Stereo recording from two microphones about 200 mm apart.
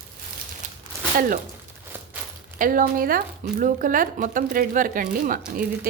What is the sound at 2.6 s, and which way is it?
Speech, 45° right (ahead or behind).